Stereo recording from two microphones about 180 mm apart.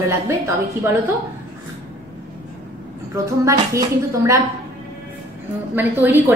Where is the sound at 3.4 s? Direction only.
15° right (ahead or behind).